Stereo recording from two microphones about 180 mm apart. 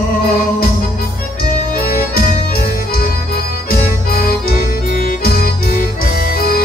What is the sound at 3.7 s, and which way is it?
Music, 55° left (ahead or behind).